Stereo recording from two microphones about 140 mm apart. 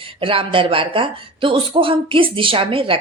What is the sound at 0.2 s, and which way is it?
Speech, 40° right (ahead or behind).